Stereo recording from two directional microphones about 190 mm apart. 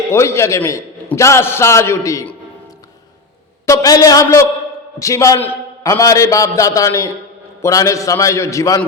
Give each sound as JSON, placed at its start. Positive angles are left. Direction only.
{"t": 0.1, "sound": "a man's voice", "side_deg": 15}
{"t": 3.7, "sound": "a man's voice", "side_deg": 15}